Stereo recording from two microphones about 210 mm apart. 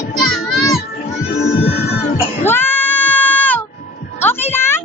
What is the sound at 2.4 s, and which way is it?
Sheep, 10° left (ahead or behind).